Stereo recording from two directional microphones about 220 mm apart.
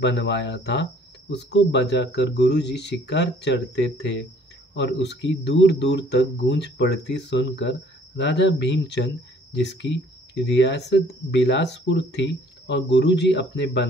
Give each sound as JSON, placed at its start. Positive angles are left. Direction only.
{"t": 0.0, "sound": "speech", "side_deg": 55}